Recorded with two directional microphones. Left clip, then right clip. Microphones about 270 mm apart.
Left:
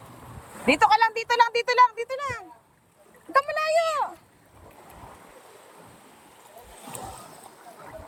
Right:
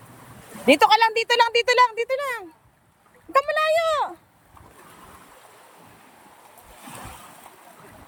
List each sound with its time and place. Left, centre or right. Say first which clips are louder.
0.7 s speech: right 3 dB; centre
3.8 s a child's voice: right 3 dB; right